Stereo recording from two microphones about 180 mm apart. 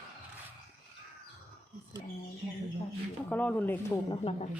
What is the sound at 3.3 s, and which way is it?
Speech, 10° left (ahead or behind).